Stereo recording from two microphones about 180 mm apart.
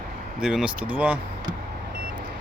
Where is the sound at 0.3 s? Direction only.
5° right (ahead or behind).